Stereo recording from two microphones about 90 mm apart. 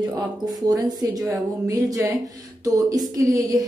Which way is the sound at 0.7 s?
40° right (ahead or behind).